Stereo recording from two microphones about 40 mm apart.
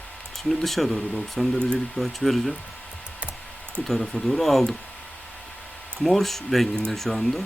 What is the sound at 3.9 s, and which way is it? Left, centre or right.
Speech, centre.